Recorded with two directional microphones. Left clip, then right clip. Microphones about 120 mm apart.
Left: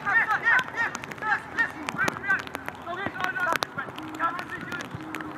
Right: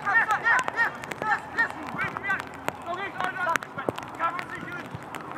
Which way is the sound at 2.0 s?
40° right (ahead or behind).